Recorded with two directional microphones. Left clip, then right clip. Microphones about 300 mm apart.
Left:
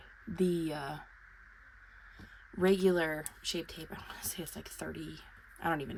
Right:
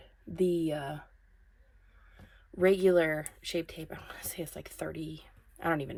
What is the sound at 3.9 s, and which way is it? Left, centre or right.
Speech, centre.